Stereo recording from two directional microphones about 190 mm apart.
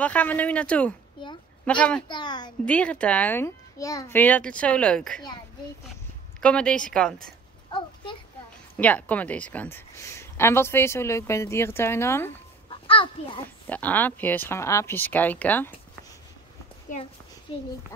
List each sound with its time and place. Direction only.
0.0 s a woman's voice: 10° left (ahead or behind)
2.0 s a woman's voice: 25° left (ahead or behind)
2.6 s a woman's voice: 5° left (ahead or behind)
6.4 s speech: 5° left (ahead or behind)
7.7 s a sound: 25° left (ahead or behind)
8.7 s a woman's voice: 10° left (ahead or behind)
12.6 s a sound: 30° left (ahead or behind)
13.7 s a woman's voice: 10° left (ahead or behind)
17.5 s a woman's voice: 25° left (ahead or behind)